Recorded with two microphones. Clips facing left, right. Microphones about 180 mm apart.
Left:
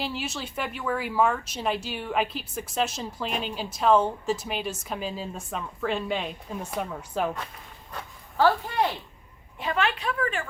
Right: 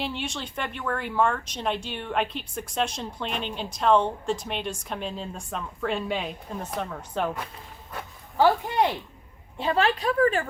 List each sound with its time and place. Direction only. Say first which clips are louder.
0.0 s speech: even; 5° left (ahead or behind)
8.4 s speech: right 1 dB; 15° right (ahead or behind)
9.6 s a woman's voice: right 4 dB; 30° right (ahead or behind)